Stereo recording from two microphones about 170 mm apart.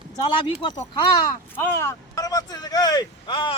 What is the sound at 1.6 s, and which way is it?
Speech, 15° left (ahead or behind).